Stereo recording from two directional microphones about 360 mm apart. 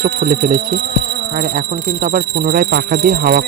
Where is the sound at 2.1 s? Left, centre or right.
Right.